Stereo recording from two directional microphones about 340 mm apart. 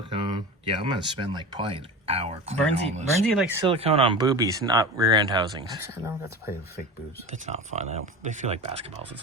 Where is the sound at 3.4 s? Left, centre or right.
Centre.